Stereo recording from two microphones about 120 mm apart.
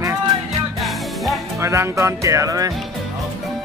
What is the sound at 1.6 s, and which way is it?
Speech, 25° right (ahead or behind).